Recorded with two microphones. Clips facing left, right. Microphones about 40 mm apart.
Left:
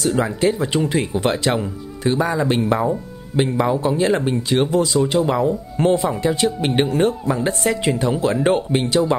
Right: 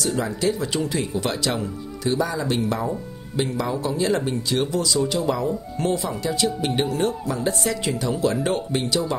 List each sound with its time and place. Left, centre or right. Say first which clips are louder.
0.0 s speech: left 5 dB; left